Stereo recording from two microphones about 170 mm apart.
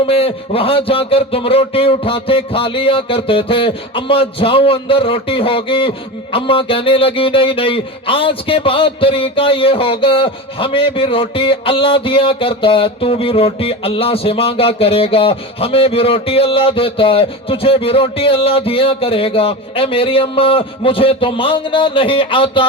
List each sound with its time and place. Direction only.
0.1 s speech: 35° left (ahead or behind)